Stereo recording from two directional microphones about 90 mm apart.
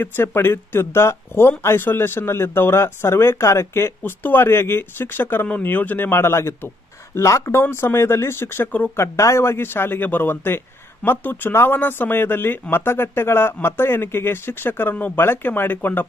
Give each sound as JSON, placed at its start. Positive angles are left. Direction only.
{"t": 0.0, "sound": "speech", "side_deg": 25}